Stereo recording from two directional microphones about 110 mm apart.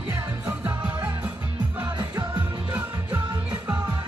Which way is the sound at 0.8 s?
20° right (ahead or behind).